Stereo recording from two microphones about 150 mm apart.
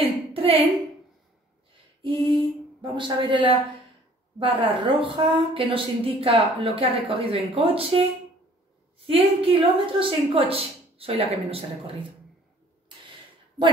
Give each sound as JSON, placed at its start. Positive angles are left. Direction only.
{"t": 0.0, "sound": "a sound", "side_deg": -40}
{"t": 2.0, "sound": "speech", "side_deg": -35}
{"t": 9.0, "sound": "speech", "side_deg": -40}